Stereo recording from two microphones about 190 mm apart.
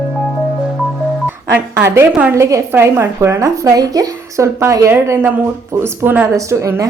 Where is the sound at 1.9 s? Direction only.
10° right (ahead or behind).